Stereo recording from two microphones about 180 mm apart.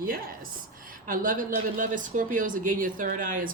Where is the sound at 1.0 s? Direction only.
50° right (ahead or behind).